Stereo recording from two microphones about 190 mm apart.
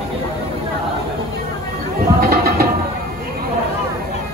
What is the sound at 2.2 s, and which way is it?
Music, 55° right (ahead or behind).